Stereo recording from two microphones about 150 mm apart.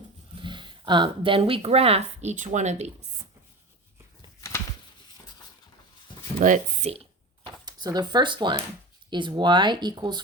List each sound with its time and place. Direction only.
0.3 s speech: 30° right (ahead or behind); by 2.9 s 50° right (ahead or behind)
4.4 s a sound: 20° left (ahead or behind)
6.4 s speech: 60° right (ahead or behind)
7.6 s speech: 25° right (ahead or behind)